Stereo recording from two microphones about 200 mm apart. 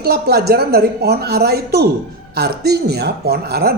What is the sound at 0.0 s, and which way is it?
A woman's voice, 50° right (ahead or behind).